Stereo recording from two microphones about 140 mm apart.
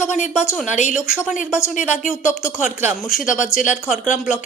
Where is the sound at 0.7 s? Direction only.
60° left (ahead or behind).